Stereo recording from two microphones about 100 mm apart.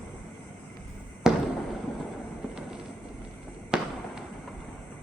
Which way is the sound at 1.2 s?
5° right (ahead or behind).